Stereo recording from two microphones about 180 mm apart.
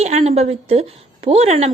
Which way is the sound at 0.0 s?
35° right (ahead or behind).